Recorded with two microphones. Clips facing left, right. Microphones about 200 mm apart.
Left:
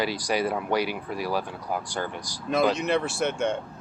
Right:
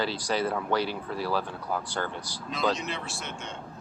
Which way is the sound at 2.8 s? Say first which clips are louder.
Left 11 dB; 55° left (ahead or behind).